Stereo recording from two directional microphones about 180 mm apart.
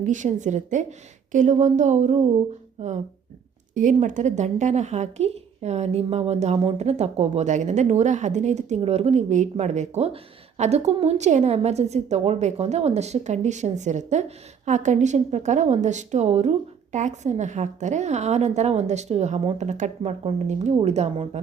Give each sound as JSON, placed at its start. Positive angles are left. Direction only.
{"t": 0.0, "sound": "a woman's voice", "side_deg": -45}